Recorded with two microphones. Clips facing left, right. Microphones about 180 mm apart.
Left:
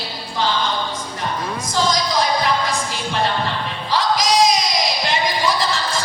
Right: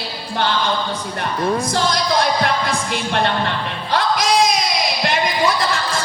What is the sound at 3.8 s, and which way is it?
Music, 60° right (ahead or behind).